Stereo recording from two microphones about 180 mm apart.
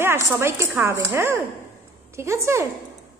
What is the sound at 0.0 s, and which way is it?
Speech, 10° right (ahead or behind).